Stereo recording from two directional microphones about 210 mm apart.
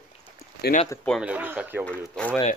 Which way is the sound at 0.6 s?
40° left (ahead or behind).